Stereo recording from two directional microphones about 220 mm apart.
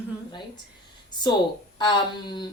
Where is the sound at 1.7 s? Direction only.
20° left (ahead or behind).